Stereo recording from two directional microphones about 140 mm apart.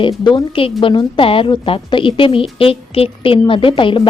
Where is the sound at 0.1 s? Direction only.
30° left (ahead or behind).